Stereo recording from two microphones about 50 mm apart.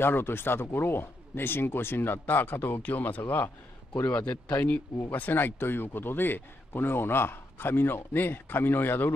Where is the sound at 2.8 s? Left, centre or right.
Left.